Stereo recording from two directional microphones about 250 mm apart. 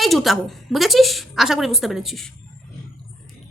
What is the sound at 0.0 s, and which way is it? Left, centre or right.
A woman's voice, centre.